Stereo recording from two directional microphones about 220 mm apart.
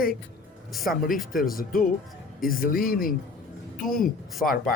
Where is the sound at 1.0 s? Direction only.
40° left (ahead or behind).